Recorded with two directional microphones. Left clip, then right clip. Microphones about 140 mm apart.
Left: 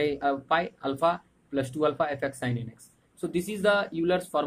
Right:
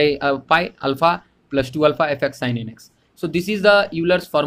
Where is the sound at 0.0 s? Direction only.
40° right (ahead or behind).